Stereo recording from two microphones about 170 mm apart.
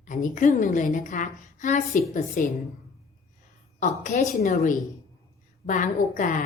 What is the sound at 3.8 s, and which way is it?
A woman's voice, 45° left (ahead or behind).